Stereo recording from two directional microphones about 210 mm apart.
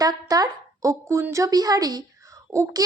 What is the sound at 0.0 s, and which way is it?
A woman's voice, 15° right (ahead or behind).